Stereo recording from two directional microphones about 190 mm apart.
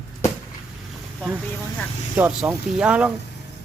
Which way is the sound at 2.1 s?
10° right (ahead or behind).